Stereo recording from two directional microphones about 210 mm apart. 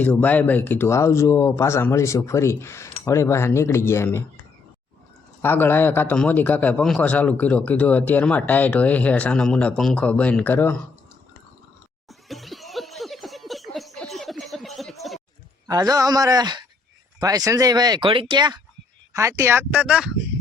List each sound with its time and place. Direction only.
0.0 s a man's voice: 10° left (ahead or behind)
5.4 s a man's voice: 10° left (ahead or behind)
12.0 s laughter: centre (ahead or behind)
15.6 s speech: 15° right (ahead or behind)